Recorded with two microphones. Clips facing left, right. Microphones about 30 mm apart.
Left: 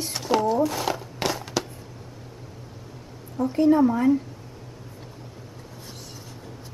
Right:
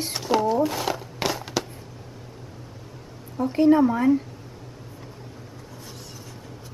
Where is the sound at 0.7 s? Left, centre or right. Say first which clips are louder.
Even; centre.